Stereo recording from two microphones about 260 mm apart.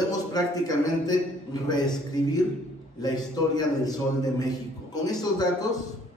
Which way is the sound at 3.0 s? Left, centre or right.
Centre.